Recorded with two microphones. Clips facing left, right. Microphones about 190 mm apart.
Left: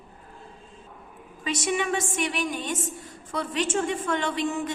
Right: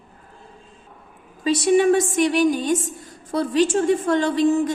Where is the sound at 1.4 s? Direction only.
35° right (ahead or behind).